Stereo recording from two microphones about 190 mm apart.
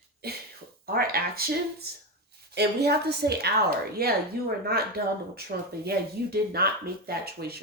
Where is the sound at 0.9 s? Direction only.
50° right (ahead or behind).